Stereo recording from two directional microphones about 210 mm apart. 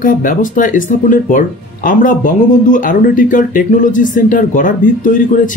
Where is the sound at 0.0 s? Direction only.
40° left (ahead or behind).